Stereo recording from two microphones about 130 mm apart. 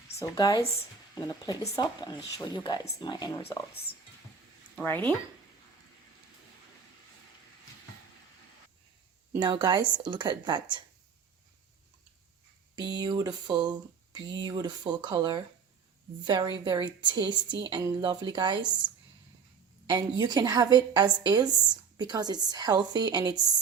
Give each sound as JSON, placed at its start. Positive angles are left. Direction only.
{"t": 0.2, "sound": "speech", "side_deg": 30}
{"t": 4.8, "sound": "speech", "side_deg": 15}
{"t": 9.4, "sound": "a woman's voice", "side_deg": -35}
{"t": 12.7, "sound": "a woman's voice", "side_deg": -30}
{"t": 19.9, "sound": "a woman's voice", "side_deg": -30}